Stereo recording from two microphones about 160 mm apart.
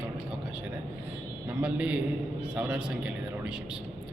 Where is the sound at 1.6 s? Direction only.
5° right (ahead or behind).